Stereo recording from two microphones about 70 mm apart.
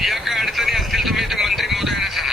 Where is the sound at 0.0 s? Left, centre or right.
Centre.